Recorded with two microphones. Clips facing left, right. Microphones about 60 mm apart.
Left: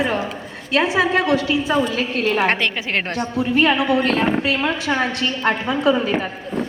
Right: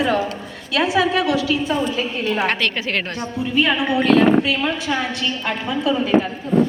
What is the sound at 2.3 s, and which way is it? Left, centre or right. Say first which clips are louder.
Speech: left 2 dB; left.